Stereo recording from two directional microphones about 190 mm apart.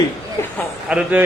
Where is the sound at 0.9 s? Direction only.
10° right (ahead or behind).